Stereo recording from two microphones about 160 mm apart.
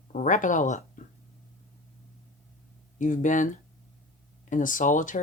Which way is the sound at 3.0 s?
50° left (ahead or behind).